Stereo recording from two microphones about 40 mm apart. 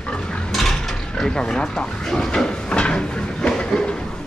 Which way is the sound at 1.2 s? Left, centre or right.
Centre.